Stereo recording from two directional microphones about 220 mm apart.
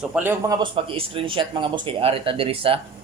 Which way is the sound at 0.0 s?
5° right (ahead or behind).